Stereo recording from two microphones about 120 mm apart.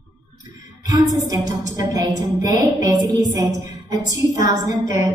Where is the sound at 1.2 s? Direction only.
30° right (ahead or behind).